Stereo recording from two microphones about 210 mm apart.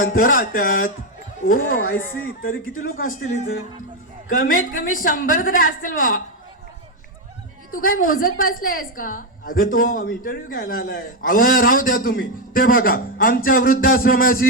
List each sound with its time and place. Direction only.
0.0 s a woman's voice: 40° left (ahead or behind)
2.0 s speech: 10° left (ahead or behind)
2.9 s a woman's voice: 40° left (ahead or behind)
4.3 s a woman's voice: 40° left (ahead or behind)
7.7 s a woman's voice: 40° left (ahead or behind)